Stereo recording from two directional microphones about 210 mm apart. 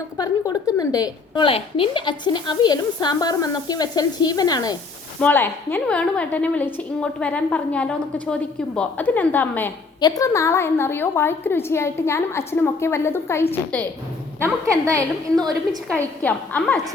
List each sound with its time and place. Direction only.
0.2 s a woman's voice: 15° left (ahead or behind)
14.4 s a woman's voice: 15° right (ahead or behind)
15.9 s a woman's voice: 5° left (ahead or behind)